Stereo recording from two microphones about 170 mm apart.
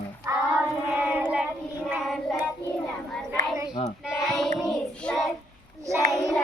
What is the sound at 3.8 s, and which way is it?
Child singing, 40° left (ahead or behind).